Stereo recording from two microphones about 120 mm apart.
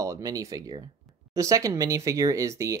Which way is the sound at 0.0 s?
30° right (ahead or behind).